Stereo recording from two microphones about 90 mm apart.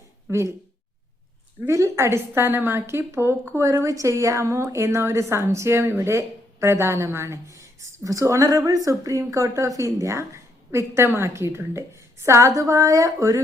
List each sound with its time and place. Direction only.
0.3 s speech: 30° right (ahead or behind)
1.6 s a woman's voice: 30° right (ahead or behind)